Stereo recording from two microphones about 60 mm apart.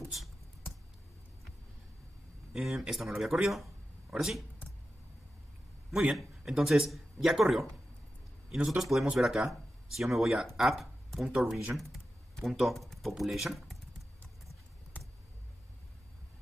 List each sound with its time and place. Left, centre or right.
0.0 s a sound: centre
2.5 s speech: centre
6.1 s speech: centre
8.6 s speech: centre